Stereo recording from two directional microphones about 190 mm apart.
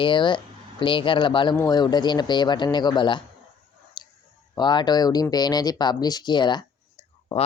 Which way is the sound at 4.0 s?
20° left (ahead or behind).